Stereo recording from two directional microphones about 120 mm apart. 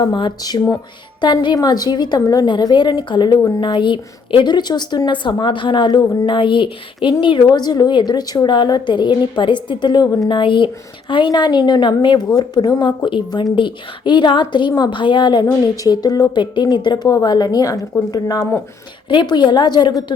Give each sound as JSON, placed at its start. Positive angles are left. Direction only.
{"t": 0.0, "sound": "a woman's voice", "side_deg": 40}
{"t": 7.4, "sound": "a woman's voice", "side_deg": 35}